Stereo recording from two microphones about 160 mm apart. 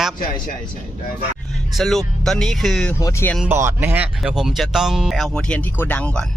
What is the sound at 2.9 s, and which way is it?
Speech, 20° left (ahead or behind).